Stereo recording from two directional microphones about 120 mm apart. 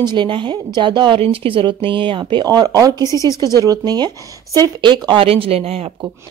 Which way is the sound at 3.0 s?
25° left (ahead or behind).